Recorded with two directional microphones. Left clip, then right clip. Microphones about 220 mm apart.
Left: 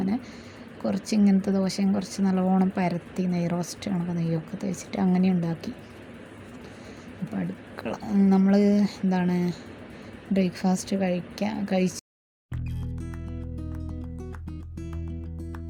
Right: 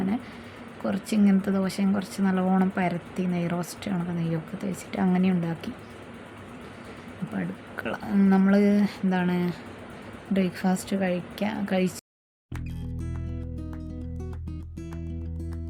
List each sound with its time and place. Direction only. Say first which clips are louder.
0.8 s speech: left 1 dB; 15° left (ahead or behind)
7.3 s speech: right 1 dB; 15° left (ahead or behind)